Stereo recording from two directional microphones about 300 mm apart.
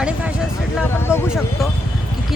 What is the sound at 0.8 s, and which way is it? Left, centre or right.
Speech, centre.